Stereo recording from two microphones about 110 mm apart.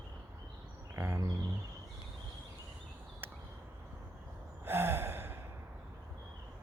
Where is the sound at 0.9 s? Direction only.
20° right (ahead or behind).